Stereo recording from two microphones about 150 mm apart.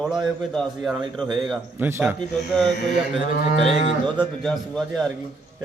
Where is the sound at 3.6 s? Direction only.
40° left (ahead or behind).